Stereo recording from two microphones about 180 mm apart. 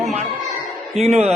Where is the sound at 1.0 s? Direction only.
35° right (ahead or behind).